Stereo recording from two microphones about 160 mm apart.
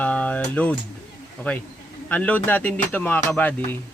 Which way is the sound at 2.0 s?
10° left (ahead or behind).